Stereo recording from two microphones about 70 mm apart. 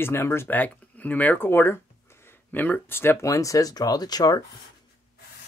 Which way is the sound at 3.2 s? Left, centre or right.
Left.